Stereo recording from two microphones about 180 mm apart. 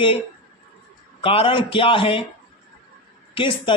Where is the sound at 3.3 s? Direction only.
25° left (ahead or behind).